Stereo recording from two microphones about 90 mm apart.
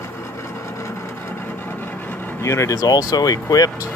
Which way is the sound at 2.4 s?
35° left (ahead or behind).